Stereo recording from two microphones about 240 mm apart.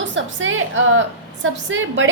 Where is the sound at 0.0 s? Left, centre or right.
Right.